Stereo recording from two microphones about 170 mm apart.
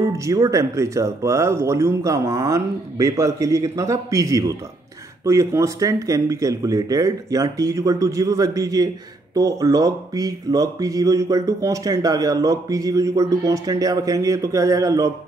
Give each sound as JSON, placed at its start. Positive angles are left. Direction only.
{"t": 0.2, "sound": "speech", "side_deg": -20}